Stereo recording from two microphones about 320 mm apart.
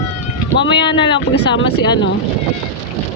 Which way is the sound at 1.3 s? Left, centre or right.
Left.